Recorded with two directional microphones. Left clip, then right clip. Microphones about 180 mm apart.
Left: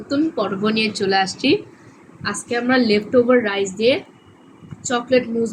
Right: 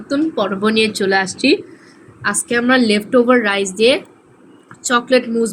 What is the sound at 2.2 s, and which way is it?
A woman's voice, 55° right (ahead or behind).